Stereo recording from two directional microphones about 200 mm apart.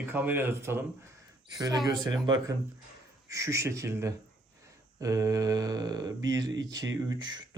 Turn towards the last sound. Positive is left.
turn(degrees=-20)  # may be behind; listen again after turning